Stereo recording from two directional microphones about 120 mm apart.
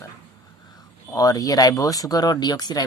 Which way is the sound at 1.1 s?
30° left (ahead or behind).